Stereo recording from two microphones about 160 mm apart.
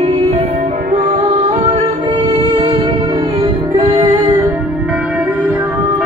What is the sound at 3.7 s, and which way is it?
Music, 35° right (ahead or behind).